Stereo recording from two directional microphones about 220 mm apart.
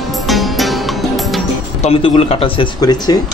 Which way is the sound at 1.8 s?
25° left (ahead or behind).